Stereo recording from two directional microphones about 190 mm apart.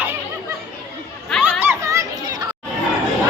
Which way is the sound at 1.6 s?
15° right (ahead or behind).